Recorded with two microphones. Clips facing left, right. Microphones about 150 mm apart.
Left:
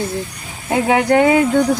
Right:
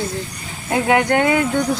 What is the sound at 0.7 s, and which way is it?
Speech, 30° left (ahead or behind).